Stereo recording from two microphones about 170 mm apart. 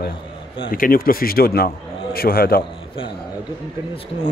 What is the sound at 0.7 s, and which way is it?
Speech, 55° left (ahead or behind).